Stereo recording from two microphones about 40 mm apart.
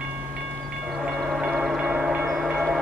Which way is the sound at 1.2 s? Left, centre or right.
Centre.